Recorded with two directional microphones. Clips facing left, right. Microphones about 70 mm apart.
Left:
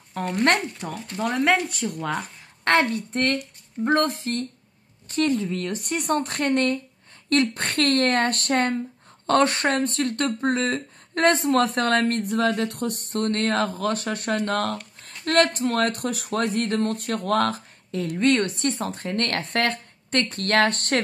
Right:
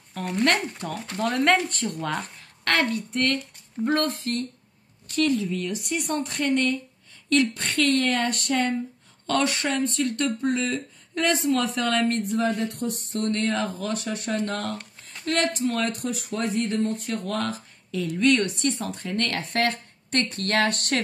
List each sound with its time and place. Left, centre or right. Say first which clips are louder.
0.5 s speech: left 3 dB; left
1.2 s speech: even; centre
2.6 s a woman's voice: left 3 dB; left
18.2 s speech: even; left